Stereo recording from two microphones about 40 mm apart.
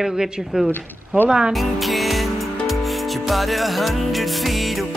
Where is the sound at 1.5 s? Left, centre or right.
Centre.